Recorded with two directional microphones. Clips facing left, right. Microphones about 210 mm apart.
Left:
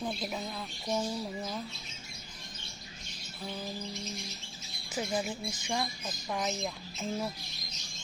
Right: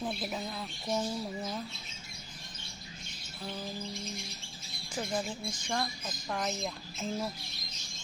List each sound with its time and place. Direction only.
0.0 s speech: 5° right (ahead or behind)
4.9 s speech: 5° left (ahead or behind)